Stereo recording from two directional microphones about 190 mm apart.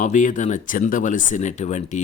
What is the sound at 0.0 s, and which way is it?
Speech, 40° left (ahead or behind).